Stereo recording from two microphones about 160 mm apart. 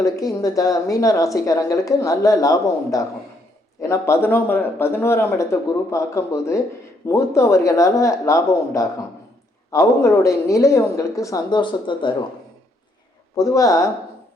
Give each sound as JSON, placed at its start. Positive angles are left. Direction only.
{"t": 0.0, "sound": "speech", "side_deg": 20}
{"t": 13.3, "sound": "speech", "side_deg": 20}